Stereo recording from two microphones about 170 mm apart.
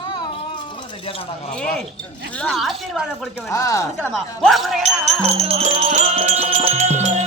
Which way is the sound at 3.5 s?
20° left (ahead or behind).